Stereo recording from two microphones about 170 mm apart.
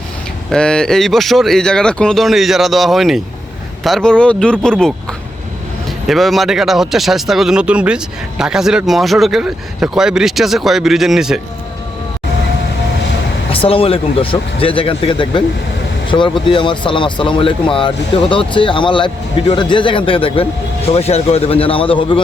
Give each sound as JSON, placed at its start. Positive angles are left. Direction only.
{"t": 0.5, "sound": "speech", "side_deg": 5}
{"t": 6.1, "sound": "speech", "side_deg": 0}
{"t": 13.5, "sound": "speech", "side_deg": 35}